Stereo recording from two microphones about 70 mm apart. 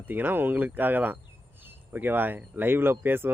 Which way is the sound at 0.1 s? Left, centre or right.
Right.